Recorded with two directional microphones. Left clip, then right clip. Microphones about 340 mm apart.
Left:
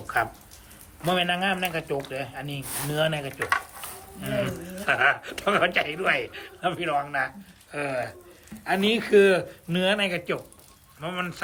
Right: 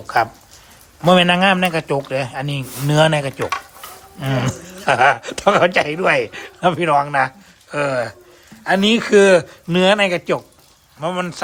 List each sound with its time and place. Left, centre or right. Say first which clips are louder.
0.1 s a man's voice: right 9 dB; centre